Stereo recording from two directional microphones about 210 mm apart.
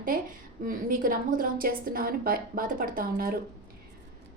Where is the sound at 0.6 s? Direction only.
40° right (ahead or behind).